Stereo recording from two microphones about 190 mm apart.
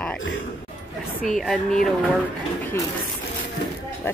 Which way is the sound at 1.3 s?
Centre (ahead or behind).